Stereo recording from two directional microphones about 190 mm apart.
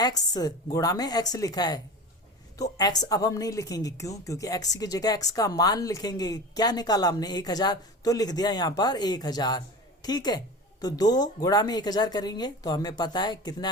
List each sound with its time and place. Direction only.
0.0 s a woman's voice: 20° left (ahead or behind)